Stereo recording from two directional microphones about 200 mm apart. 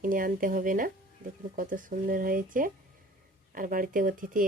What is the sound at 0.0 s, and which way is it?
Speech, 45° right (ahead or behind).